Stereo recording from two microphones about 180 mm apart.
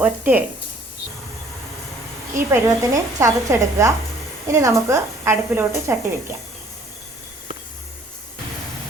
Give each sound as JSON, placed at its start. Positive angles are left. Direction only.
{"t": 0.0, "sound": "speech", "side_deg": -10}
{"t": 2.5, "sound": "speech", "side_deg": -15}